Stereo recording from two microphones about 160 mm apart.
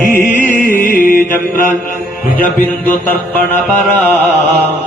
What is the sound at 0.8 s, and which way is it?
Music, 60° left (ahead or behind).